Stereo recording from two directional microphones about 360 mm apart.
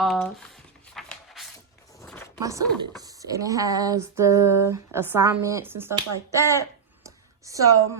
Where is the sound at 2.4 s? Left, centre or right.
Centre.